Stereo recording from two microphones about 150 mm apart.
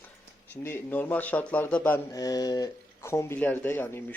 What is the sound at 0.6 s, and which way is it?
Speech, 15° left (ahead or behind).